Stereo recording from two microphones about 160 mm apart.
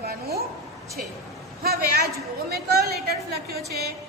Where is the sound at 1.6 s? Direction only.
70° right (ahead or behind).